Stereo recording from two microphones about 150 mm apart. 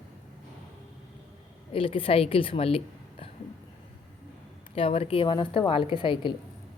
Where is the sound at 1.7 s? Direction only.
40° left (ahead or behind).